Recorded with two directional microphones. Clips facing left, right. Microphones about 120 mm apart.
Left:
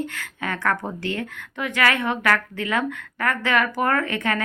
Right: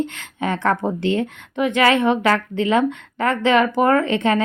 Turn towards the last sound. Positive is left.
turn(degrees=-20)  # may be behind; listen again after turning